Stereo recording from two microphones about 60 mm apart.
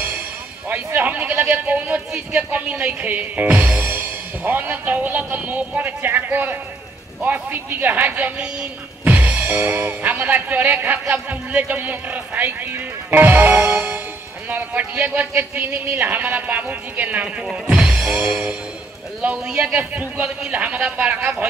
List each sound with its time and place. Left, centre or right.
0.7 s speech: right
9.0 s music: right
9.6 s speech: right
17.6 s music: right
19.2 s speech: centre